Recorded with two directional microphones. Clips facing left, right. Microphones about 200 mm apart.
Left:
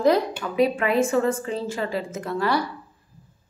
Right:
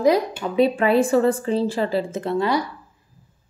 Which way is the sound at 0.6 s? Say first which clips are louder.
Right 3 dB; 30° right (ahead or behind).